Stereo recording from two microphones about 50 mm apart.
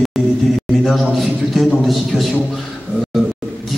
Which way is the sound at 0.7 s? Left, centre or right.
Centre.